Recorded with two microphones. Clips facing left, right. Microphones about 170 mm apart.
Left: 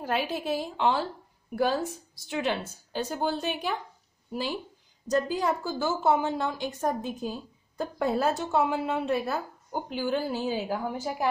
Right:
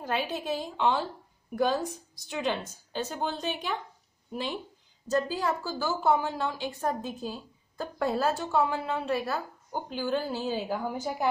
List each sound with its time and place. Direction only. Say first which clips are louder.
0.0 s a woman's voice: left 2 dB; 10° left (ahead or behind)
5.0 s a woman's voice: left 2 dB; 15° left (ahead or behind)